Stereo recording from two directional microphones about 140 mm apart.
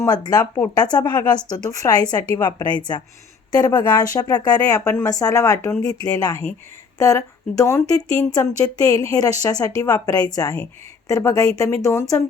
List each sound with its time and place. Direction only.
0.0 s a woman's voice: 30° left (ahead or behind)